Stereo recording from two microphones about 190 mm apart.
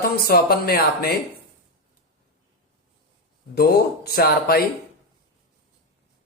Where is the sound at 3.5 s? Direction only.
55° left (ahead or behind).